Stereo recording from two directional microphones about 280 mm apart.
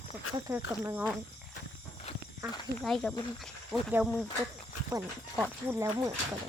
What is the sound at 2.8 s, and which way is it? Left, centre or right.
Speech, centre.